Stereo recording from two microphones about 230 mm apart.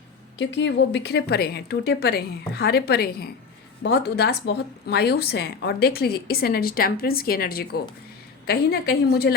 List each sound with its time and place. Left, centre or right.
0.3 s a woman's voice: left